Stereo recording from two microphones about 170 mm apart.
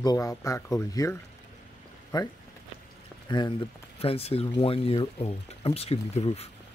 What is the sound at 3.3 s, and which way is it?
Speech, 25° left (ahead or behind).